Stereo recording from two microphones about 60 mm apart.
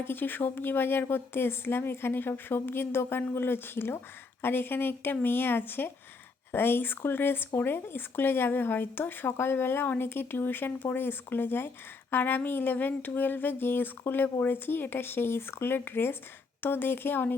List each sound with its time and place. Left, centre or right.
0.0 s speech: left